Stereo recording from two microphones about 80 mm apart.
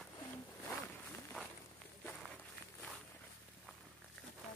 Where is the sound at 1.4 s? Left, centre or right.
Centre.